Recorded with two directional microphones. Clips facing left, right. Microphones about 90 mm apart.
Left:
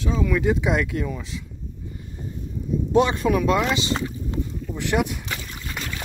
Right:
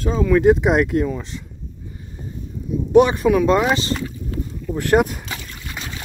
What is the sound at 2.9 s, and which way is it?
Speech, 20° right (ahead or behind).